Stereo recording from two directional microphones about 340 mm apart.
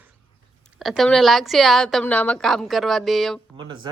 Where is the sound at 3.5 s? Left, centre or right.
Centre.